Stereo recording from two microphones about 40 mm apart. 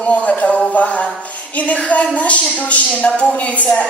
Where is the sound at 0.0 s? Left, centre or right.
Left.